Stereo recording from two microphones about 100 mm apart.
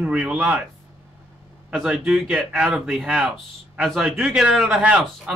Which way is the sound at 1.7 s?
10° right (ahead or behind).